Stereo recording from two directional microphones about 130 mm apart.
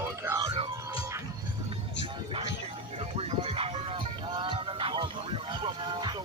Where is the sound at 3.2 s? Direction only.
50° right (ahead or behind).